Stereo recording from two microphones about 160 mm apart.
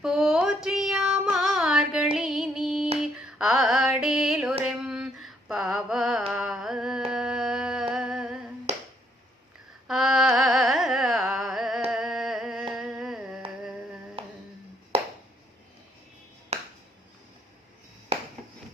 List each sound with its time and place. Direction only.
0.0 s a sound: 5° right (ahead or behind)
2.1 s female singing: 5° right (ahead or behind)
3.0 s music: 5° right (ahead or behind)
7.1 s humming: 5° right (ahead or behind)
8.7 s a sound: 40° right (ahead or behind)
9.8 s music: centre (ahead or behind)
11.9 s humming: 5° right (ahead or behind)
14.2 s a sound: 35° right (ahead or behind)
16.5 s finger snapping: 40° right (ahead or behind)